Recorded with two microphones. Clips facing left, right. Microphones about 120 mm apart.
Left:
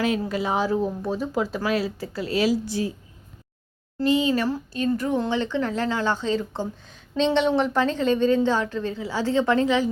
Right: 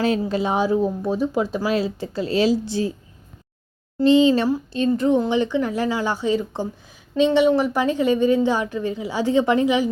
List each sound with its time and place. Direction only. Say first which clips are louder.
0.0 s speech: right 3 dB; 30° right (ahead or behind)
3.9 s a woman's voice: right 6 dB; 25° right (ahead or behind)